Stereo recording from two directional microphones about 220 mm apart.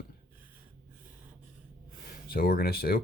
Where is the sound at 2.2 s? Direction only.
45° left (ahead or behind).